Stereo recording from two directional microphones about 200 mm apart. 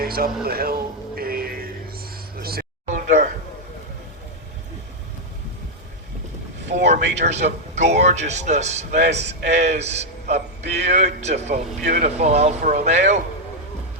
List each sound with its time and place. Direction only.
0.0 s speech: 50° right (ahead or behind)
0.4 s music: 50° right (ahead or behind)
2.4 s a sound: 50° right (ahead or behind)
7.2 s speech: 35° right (ahead or behind)